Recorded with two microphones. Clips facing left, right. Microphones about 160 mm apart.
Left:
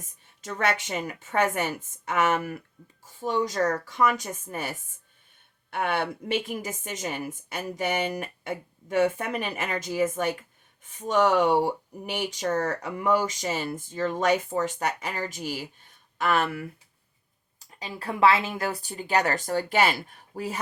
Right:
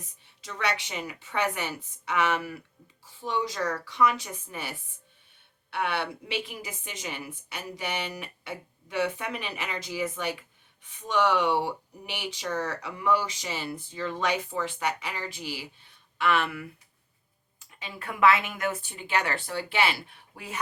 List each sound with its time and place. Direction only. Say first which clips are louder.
0.0 s speech: left 5 dB; 45° left (ahead or behind)